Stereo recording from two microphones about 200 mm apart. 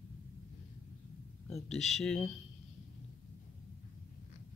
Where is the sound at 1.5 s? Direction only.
Centre (ahead or behind).